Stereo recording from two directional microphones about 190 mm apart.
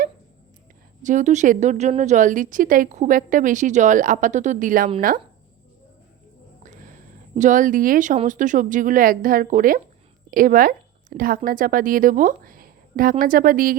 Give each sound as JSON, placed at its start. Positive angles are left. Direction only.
{"t": 1.0, "sound": "a woman's voice", "side_deg": -40}
{"t": 7.3, "sound": "speech", "side_deg": -40}